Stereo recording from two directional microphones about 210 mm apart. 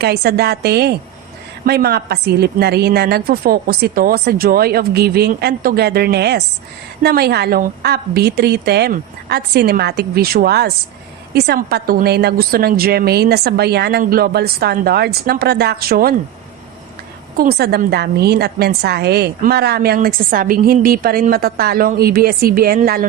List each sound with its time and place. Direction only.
0.0 s a woman's voice: 50° right (ahead or behind)
17.3 s a woman's voice: 45° right (ahead or behind)